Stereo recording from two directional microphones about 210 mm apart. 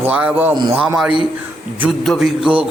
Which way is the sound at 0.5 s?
20° right (ahead or behind).